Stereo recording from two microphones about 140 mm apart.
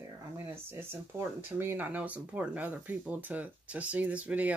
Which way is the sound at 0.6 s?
15° right (ahead or behind).